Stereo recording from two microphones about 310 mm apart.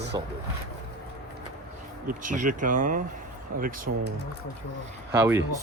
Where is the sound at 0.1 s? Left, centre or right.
Centre.